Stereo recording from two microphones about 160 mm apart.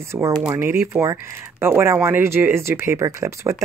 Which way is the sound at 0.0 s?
15° right (ahead or behind).